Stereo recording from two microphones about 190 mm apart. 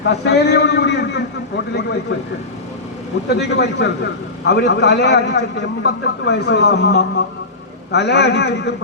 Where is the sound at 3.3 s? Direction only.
60° left (ahead or behind).